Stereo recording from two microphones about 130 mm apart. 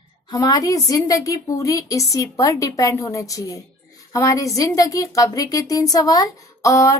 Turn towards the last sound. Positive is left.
turn(degrees=25)  # may be behind; listen again after turning